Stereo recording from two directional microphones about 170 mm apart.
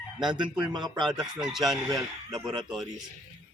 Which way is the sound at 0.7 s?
25° right (ahead or behind).